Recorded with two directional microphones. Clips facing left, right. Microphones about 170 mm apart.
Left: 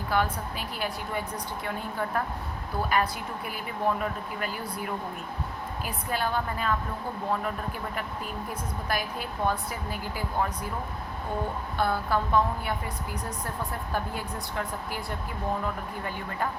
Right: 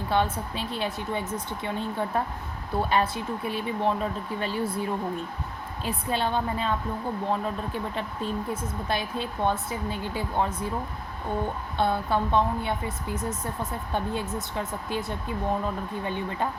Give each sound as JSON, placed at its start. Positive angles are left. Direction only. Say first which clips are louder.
{"t": 0.1, "sound": "speech", "louder": "right 2 dB", "side_deg": -25}
{"t": 11.8, "sound": "speech", "louder": "right 2 dB", "side_deg": -25}